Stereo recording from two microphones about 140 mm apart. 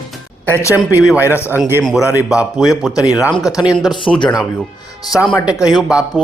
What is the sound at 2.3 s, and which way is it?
Speech, 5° right (ahead or behind).